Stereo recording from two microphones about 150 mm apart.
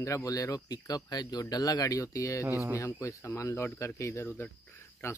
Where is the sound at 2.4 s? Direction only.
15° right (ahead or behind).